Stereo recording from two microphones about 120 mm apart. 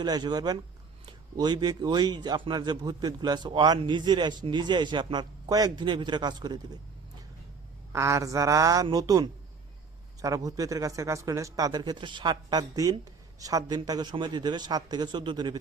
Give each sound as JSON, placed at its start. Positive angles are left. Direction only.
{"t": 0.0, "sound": "a man's voice", "side_deg": -35}
{"t": 7.9, "sound": "a woman's voice", "side_deg": -25}